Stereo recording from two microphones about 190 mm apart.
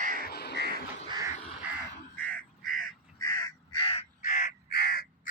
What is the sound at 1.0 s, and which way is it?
Bird, 20° right (ahead or behind).